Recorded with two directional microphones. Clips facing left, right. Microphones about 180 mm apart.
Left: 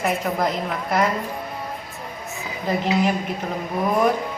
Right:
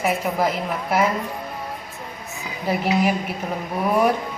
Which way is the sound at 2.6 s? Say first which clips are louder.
Even; 10° right (ahead or behind).